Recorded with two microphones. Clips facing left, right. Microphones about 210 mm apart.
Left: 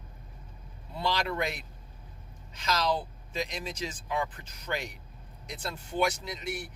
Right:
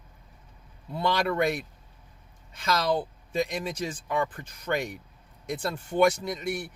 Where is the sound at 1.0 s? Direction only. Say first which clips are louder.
Right 5 dB; 55° right (ahead or behind).